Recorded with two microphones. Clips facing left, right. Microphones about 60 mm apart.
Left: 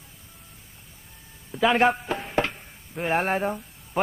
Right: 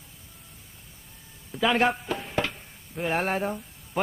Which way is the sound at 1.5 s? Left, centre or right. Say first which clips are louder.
Left 3 dB; centre.